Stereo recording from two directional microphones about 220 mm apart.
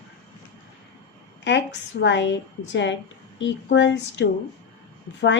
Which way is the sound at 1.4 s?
55° left (ahead or behind).